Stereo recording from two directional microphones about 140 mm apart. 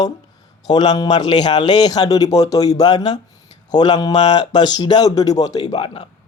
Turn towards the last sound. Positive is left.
turn(degrees=35)  # may be behind; listen again after turning